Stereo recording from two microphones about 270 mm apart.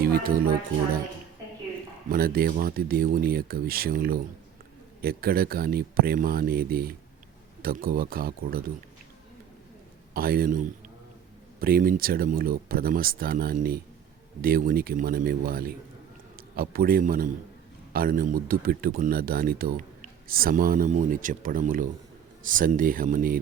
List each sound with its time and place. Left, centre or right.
0.0 s speech: right
2.0 s speech: right
10.2 s a man's voice: right